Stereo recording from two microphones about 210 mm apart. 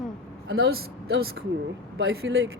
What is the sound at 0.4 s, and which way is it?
Speech, 50° right (ahead or behind).